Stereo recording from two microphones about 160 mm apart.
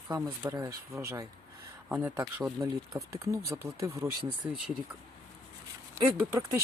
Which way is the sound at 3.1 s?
15° right (ahead or behind).